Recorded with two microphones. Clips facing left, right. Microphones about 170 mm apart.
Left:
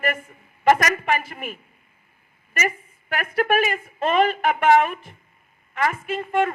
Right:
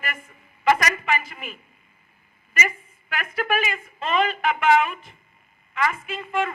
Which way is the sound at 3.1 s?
50° left (ahead or behind).